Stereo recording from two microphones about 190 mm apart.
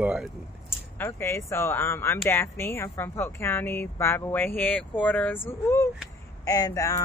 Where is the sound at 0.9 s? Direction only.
15° left (ahead or behind).